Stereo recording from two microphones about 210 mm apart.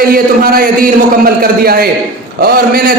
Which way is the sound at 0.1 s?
45° right (ahead or behind).